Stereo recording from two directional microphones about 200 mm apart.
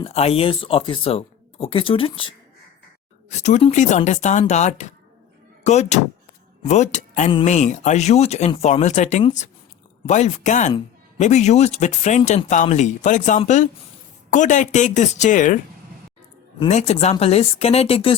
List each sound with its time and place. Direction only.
0.0 s speech: 30° left (ahead or behind)
16.6 s speech: 35° left (ahead or behind)